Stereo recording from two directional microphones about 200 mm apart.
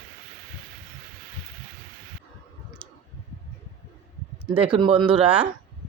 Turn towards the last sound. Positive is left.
turn(degrees=-25)  # may be behind; listen again after turning